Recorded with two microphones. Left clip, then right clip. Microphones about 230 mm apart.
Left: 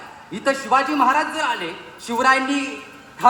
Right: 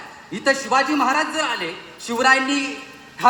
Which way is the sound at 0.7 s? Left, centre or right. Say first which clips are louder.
Left 4 dB; centre.